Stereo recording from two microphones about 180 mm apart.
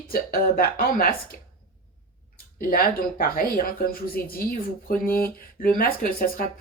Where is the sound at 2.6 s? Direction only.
50° left (ahead or behind).